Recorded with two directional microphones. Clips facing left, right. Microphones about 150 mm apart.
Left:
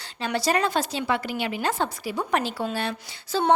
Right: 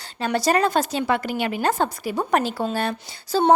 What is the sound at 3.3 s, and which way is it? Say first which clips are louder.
Female singing: right 4 dB; 40° right (ahead or behind).